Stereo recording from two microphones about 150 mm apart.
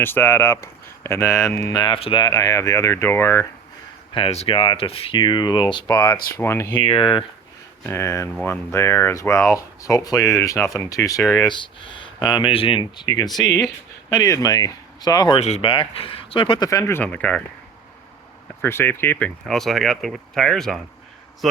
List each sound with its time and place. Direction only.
0.0 s speech: 15° left (ahead or behind)
1.7 s speech: 35° left (ahead or behind)
2.2 s speech: 20° left (ahead or behind)
4.1 s speech: 40° left (ahead or behind)
6.3 s speech: 15° left (ahead or behind)
6.7 s speech: 35° left (ahead or behind)
7.9 s speech: 20° left (ahead or behind)
11.4 s speech: 35° left (ahead or behind)
15.4 s speech: 45° left (ahead or behind)
16.6 s speech: 20° left (ahead or behind)
18.6 s speech: 15° left (ahead or behind)
19.5 s speech: centre (ahead or behind)